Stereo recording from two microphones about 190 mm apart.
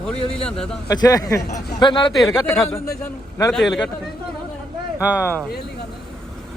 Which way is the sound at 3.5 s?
Centre (ahead or behind).